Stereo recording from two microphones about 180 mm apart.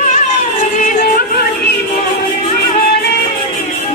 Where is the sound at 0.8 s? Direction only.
50° left (ahead or behind).